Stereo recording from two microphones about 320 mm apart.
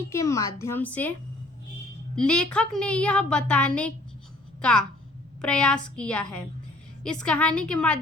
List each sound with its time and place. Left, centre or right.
0.0 s a woman's voice: centre
2.1 s a woman's voice: centre